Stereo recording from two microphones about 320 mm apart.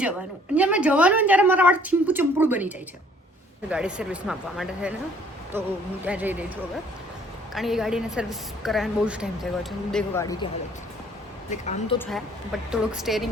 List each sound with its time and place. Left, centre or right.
0.5 s a woman's voice: centre
11.4 s speech: left
12.7 s a woman's voice: centre